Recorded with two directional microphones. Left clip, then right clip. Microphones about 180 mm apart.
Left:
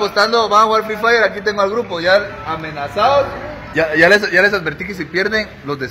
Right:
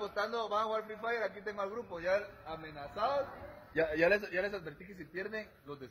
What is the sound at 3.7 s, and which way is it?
Speech, 60° right (ahead or behind).